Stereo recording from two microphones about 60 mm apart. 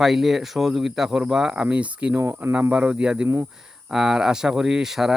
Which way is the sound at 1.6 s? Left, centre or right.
Right.